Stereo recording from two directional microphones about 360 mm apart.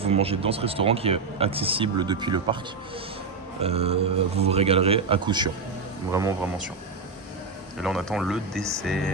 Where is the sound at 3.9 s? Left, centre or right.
Right.